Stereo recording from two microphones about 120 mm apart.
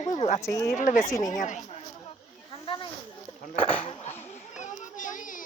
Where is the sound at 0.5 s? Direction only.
25° left (ahead or behind).